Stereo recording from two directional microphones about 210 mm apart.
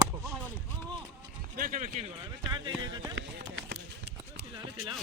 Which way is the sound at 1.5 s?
40° right (ahead or behind).